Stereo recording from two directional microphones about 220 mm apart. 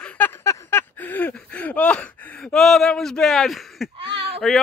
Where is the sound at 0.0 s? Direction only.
5° left (ahead or behind).